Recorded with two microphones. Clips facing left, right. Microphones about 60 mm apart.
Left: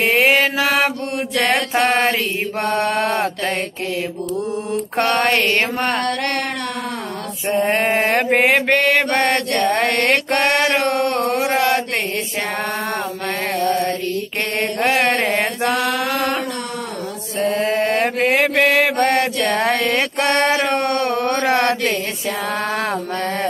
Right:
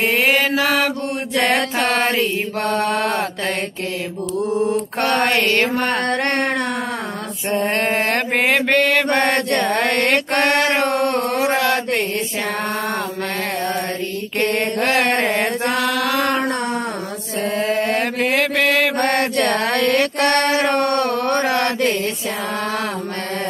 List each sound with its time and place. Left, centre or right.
0.0 s mantra: left
2.8 s mantra: centre
4.9 s mantra: left
6.0 s carnatic music: right
7.8 s a sound: centre
8.6 s mantra: centre
10.7 s carnatic music: right
14.8 s mantra: left
17.6 s mantra: left
20.0 s mantra: left